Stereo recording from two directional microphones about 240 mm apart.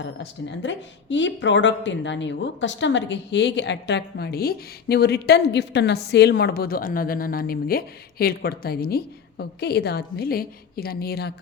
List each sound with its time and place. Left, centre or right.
0.0 s speech: left